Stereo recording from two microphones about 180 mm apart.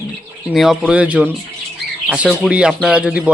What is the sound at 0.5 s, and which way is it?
A man's voice, centre (ahead or behind).